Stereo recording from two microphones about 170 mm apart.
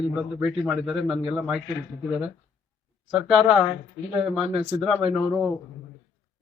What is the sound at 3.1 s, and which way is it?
A man's voice, 5° right (ahead or behind).